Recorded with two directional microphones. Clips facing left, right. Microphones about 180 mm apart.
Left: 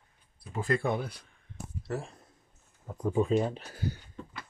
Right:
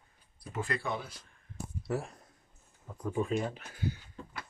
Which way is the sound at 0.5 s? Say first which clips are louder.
Left 6 dB; 45° left (ahead or behind).